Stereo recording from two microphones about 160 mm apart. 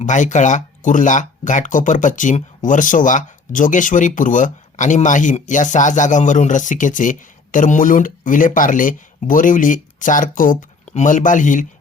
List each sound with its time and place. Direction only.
0.0 s speech: 50° left (ahead or behind)